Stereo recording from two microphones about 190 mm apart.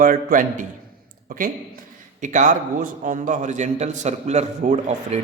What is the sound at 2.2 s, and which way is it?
A man's voice, 40° right (ahead or behind).